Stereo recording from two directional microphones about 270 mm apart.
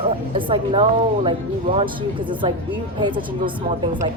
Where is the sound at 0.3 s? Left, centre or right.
Centre.